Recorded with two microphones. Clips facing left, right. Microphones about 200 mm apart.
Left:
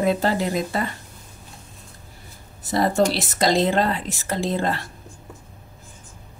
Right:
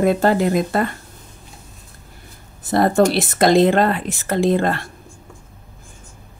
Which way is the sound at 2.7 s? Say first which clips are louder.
Right 5 dB; 55° right (ahead or behind).